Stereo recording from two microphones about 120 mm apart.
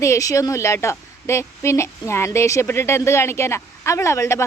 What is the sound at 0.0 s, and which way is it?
A woman's voice, 25° left (ahead or behind).